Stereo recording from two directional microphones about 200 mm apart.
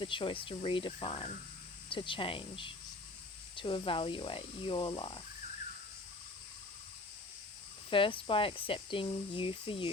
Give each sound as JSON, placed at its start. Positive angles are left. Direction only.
{"t": 0.0, "sound": "speech", "side_deg": 25}
{"t": 7.9, "sound": "speech", "side_deg": 25}